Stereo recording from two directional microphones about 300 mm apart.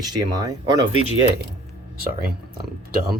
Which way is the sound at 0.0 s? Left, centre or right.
Centre.